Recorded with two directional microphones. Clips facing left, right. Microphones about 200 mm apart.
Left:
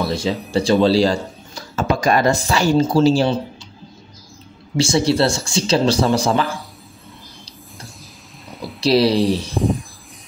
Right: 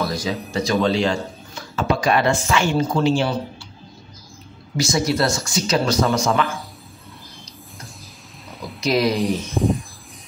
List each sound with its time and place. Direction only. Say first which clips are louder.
0.1 s speech: left 5 dB; 25° left (ahead or behind)
4.7 s speech: left 4 dB; 30° left (ahead or behind)
8.5 s a sound: left 3 dB; centre (ahead or behind)
8.8 s speech: left 4 dB; 30° left (ahead or behind)
9.2 s speech: left 2 dB; centre (ahead or behind)